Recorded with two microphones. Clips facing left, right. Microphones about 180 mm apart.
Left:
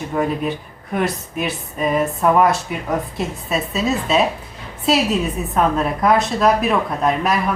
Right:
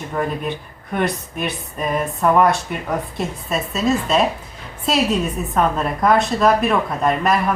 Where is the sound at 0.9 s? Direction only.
Centre (ahead or behind).